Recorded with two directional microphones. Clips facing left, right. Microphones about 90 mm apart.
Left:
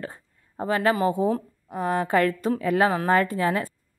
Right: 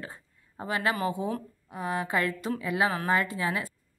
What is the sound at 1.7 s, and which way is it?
A woman's voice, 50° left (ahead or behind).